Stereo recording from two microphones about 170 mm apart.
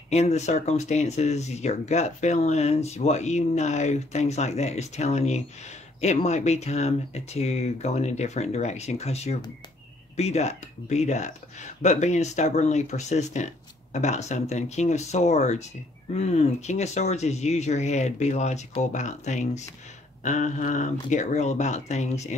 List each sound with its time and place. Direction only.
0.1 s speech: 40° left (ahead or behind)